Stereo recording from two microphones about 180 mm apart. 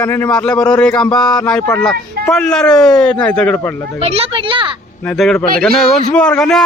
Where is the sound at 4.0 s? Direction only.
35° right (ahead or behind).